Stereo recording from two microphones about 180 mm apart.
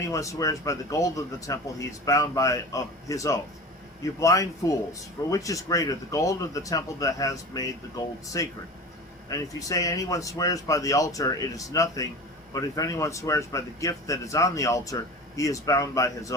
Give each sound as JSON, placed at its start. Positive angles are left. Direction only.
{"t": 0.1, "sound": "a man's voice", "side_deg": 20}